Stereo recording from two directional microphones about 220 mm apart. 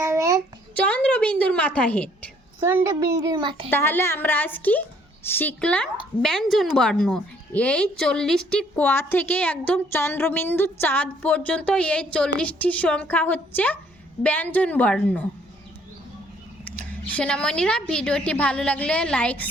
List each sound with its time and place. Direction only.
0.0 s a sound: 15° right (ahead or behind)
0.8 s a woman's voice: 5° left (ahead or behind)
2.6 s a child's voice: 10° right (ahead or behind)
3.7 s a woman's voice: 10° left (ahead or behind)
16.6 s a woman's voice: 5° left (ahead or behind)